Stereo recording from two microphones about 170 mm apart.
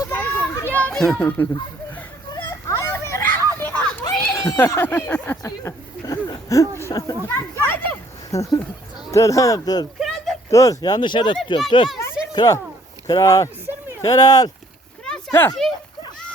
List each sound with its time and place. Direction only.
0.0 s children playing: 10° left (ahead or behind)
2.3 s children playing: 20° left (ahead or behind)
4.0 s speech: 15° left (ahead or behind)
5.5 s speech: 20° left (ahead or behind)
10.0 s a sound: centre (ahead or behind)
10.5 s speech: 20° left (ahead or behind)
15.0 s a sound: 10° left (ahead or behind)